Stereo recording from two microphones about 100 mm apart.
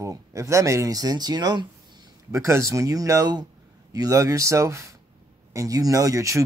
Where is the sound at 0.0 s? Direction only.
30° right (ahead or behind).